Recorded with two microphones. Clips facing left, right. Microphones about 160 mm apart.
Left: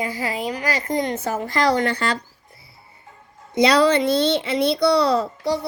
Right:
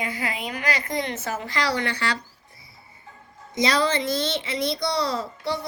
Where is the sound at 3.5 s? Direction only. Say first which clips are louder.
Left 7 dB; 65° left (ahead or behind).